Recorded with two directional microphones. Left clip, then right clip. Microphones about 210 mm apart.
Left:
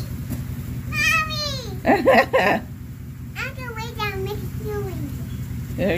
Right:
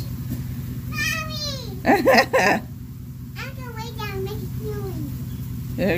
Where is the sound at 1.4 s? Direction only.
10° right (ahead or behind).